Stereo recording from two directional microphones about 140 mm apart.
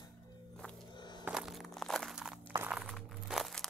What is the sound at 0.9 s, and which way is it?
Music, 30° left (ahead or behind).